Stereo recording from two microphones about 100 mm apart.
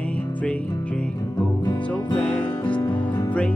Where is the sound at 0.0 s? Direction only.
15° left (ahead or behind).